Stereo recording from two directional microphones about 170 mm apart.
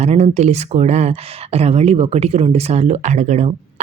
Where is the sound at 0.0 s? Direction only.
40° right (ahead or behind).